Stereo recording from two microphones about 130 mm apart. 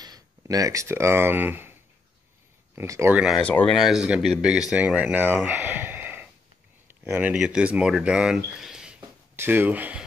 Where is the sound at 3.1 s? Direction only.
5° right (ahead or behind).